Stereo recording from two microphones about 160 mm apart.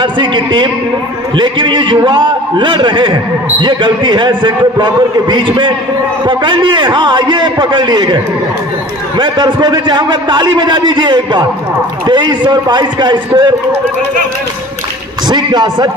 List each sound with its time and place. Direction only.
0.0 s a man's voice: 30° right (ahead or behind)
9.2 s a man's voice: 30° right (ahead or behind)
15.2 s a man's voice: 25° right (ahead or behind)